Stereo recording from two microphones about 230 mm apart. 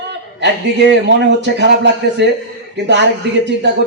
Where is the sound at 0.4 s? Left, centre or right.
Right.